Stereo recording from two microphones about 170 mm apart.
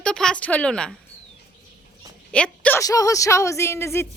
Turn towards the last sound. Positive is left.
turn(degrees=15)  # may be behind; listen again after turning